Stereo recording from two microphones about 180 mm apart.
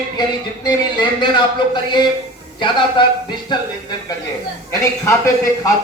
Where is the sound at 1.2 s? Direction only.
25° left (ahead or behind).